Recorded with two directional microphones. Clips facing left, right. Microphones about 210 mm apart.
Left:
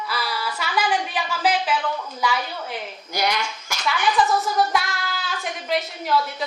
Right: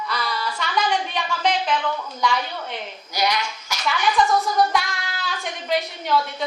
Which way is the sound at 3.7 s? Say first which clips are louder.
Right 1 dB; 50° left (ahead or behind).